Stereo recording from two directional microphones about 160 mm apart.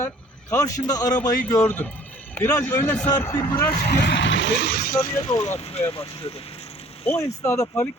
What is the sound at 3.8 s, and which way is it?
Speech, 90° left.